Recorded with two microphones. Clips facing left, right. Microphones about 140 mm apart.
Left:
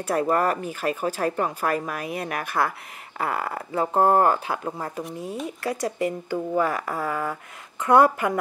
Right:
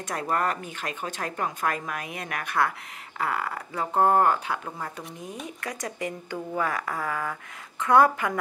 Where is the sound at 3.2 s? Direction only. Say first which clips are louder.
Left 2 dB; 30° left (ahead or behind).